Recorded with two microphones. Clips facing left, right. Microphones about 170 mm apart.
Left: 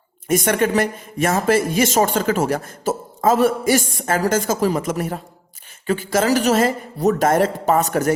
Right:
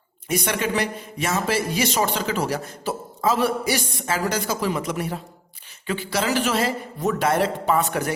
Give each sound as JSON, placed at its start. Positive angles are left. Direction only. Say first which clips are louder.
{"t": 0.3, "sound": "speech", "louder": "left 6 dB", "side_deg": 50}